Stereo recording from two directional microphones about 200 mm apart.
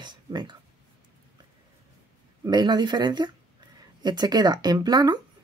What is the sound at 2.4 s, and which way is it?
Speech, 20° right (ahead or behind).